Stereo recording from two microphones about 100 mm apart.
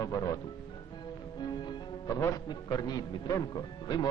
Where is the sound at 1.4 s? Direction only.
45° left (ahead or behind).